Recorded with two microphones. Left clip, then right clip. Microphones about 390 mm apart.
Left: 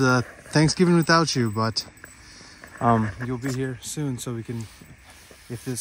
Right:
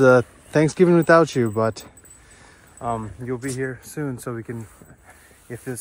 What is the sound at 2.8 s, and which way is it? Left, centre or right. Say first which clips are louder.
Speech: left 5 dB; left.